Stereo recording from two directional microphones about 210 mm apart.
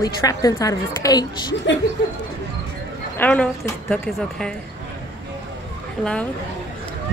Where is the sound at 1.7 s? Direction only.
60° left (ahead or behind).